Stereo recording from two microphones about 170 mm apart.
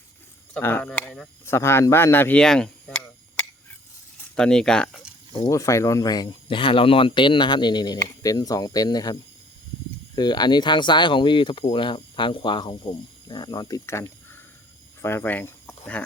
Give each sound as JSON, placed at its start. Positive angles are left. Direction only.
{"t": 0.5, "sound": "speech", "side_deg": 10}
{"t": 1.5, "sound": "speech", "side_deg": 15}
{"t": 5.5, "sound": "speech", "side_deg": 20}
{"t": 10.2, "sound": "speech", "side_deg": 25}